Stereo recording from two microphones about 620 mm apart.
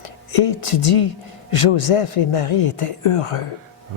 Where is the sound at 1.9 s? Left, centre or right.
Left.